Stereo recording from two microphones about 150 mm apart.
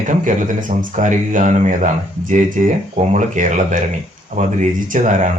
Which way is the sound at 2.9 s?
55° right (ahead or behind).